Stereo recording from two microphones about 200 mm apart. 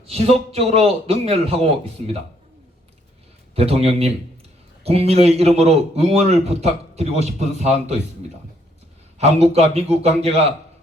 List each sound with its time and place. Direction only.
0.0 s a man's voice: 30° right (ahead or behind)
3.5 s a man's voice: 30° right (ahead or behind)
9.1 s a man's voice: 30° right (ahead or behind)